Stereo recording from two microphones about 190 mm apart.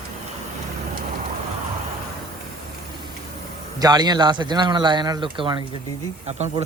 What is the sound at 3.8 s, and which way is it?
A man's voice, 20° right (ahead or behind).